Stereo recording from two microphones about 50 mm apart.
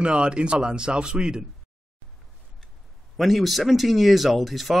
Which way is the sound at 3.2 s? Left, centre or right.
Centre.